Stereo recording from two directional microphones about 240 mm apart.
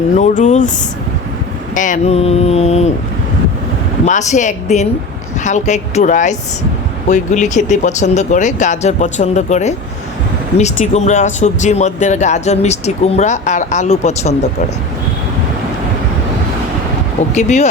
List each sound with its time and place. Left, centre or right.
0.2 s speech: left
1.7 s speech: left
4.0 s speech: left
17.3 s speech: left